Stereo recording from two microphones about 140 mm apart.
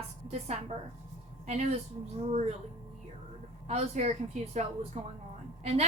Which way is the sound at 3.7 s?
55° right (ahead or behind).